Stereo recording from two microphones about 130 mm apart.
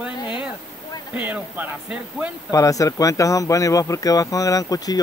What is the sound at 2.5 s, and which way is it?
Speech, 25° left (ahead or behind).